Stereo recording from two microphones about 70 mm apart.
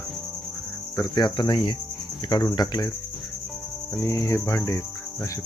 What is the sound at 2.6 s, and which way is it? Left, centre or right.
Speech, left.